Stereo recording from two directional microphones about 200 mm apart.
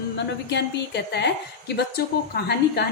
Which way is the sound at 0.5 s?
60° left (ahead or behind).